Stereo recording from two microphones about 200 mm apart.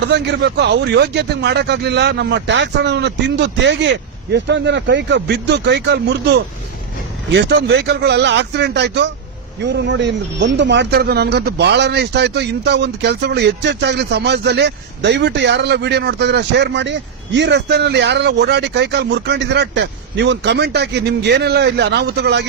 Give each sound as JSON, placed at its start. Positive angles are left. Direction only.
{"t": 0.1, "sound": "speech", "side_deg": -60}